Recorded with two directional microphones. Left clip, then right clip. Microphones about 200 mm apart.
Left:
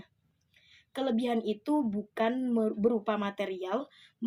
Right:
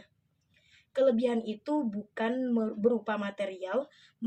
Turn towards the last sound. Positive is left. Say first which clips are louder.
# left 1 dB
turn(degrees=50)  # may be behind; listen again after turning